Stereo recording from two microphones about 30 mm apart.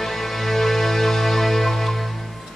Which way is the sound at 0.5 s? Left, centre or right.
Centre.